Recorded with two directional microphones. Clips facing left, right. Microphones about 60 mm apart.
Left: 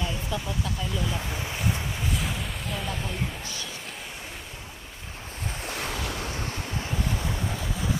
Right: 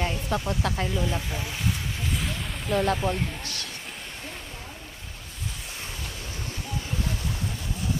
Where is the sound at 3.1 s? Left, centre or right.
Right.